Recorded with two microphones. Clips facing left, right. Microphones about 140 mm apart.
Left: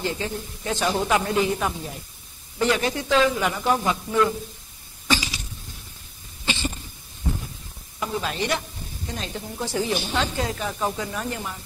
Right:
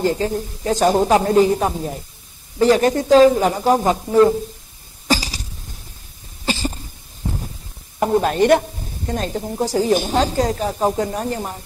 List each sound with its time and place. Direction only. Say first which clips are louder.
0.0 s speech: right 9 dB; 40° right (ahead or behind)
5.0 s cough: right 5 dB; 40° right (ahead or behind)
8.0 s speech: right 11 dB; 50° right (ahead or behind)